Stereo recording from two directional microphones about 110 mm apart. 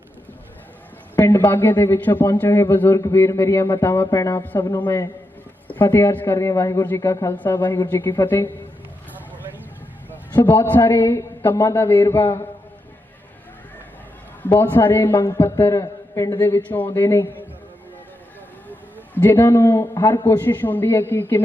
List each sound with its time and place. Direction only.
1.1 s a sound: 25° left (ahead or behind)
1.5 s a man's voice: 20° left (ahead or behind)
7.3 s a man's voice: 15° left (ahead or behind)
10.1 s a sound: 15° left (ahead or behind)
10.7 s a man's voice: 20° left (ahead or behind)
14.6 s a man's voice: 20° left (ahead or behind); by 16.4 s 35° left (ahead or behind)
16.4 s a man's voice: 20° left (ahead or behind)
19.2 s a man's voice: 20° left (ahead or behind)
20.2 s a man's voice: 20° left (ahead or behind)